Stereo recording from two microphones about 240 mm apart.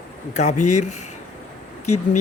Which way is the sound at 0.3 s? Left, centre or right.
Left.